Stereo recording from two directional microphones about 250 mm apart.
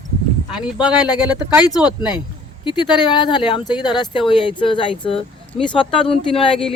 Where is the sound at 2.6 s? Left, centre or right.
Centre.